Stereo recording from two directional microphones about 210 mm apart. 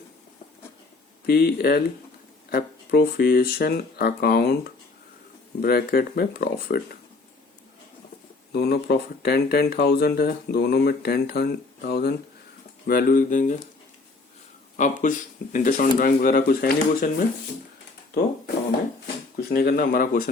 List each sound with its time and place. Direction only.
1.3 s speech: 50° left (ahead or behind)
5.6 s speech: 45° left (ahead or behind)
8.5 s speech: 50° left (ahead or behind)
14.8 s speech: 35° left (ahead or behind)
19.0 s speech: 45° left (ahead or behind)